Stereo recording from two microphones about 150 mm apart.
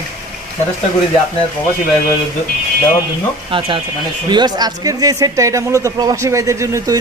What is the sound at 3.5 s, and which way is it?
Speech, 35° right (ahead or behind).